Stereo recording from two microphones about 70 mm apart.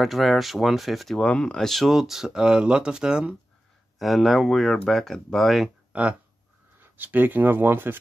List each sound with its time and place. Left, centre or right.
0.0 s speech: centre
1.2 s speech: centre
4.0 s speech: centre
6.8 s speech: right